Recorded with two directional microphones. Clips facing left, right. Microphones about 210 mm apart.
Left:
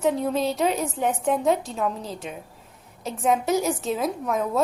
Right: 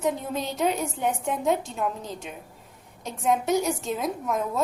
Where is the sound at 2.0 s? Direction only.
35° left (ahead or behind).